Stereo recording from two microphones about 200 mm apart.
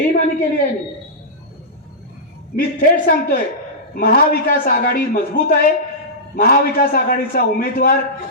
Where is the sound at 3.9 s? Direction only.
50° left (ahead or behind).